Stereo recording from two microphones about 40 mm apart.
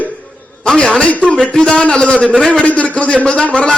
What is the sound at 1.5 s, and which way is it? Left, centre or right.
Speech, centre.